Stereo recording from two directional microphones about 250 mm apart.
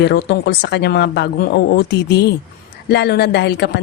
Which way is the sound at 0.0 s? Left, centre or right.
Left.